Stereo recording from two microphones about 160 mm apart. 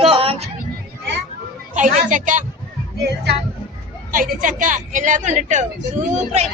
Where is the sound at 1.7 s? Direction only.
50° right (ahead or behind).